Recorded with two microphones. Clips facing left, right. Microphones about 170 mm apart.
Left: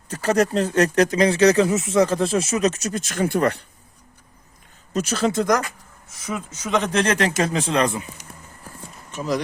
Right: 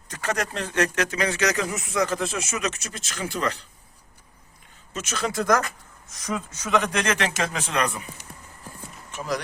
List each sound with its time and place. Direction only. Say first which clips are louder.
0.1 s speech: left 9 dB; 35° left (ahead or behind); by 3.5 s 50° left (ahead or behind)
4.9 s speech: left 6 dB; 35° left (ahead or behind); by 6.7 s 10° left (ahead or behind)
6.7 s speech: left 3 dB; 20° left (ahead or behind)